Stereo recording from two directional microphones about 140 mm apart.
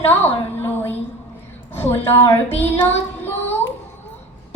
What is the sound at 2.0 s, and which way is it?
Music, 15° left (ahead or behind).